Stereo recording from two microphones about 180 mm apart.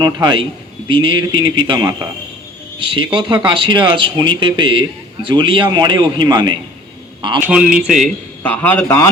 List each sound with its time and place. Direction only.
0.0 s speech: 25° right (ahead or behind)
2.7 s a man's voice: 30° right (ahead or behind)
7.4 s a man's voice: 5° right (ahead or behind); by 9.0 s 15° left (ahead or behind)